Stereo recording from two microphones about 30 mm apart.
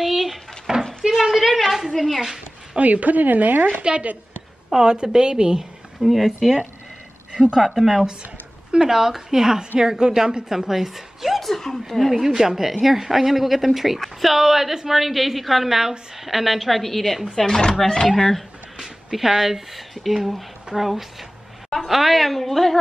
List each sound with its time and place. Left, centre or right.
0.0 s a sound: centre
1.3 s a sound: centre
1.9 s a woman's voice: centre
2.8 s speech: right
3.9 s a woman's voice: right
5.9 s a woman's voice: centre
7.5 s a woman's voice: centre
11.3 s speech: centre
12.1 s a woman's voice: centre
17.4 s speech: centre
18.0 s speech: centre
19.1 s a woman's voice: centre